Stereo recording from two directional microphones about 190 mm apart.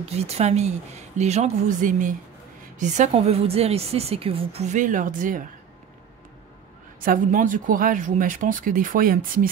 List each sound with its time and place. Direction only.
0.0 s a woman's voice: 35° right (ahead or behind)
7.0 s speech: 45° right (ahead or behind)